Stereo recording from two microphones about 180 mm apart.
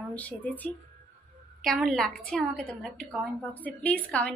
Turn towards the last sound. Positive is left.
turn(degrees=5)  # may be behind; listen again after turning